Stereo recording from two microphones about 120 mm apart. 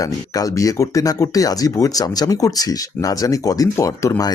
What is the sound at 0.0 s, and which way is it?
Speech, 30° left (ahead or behind).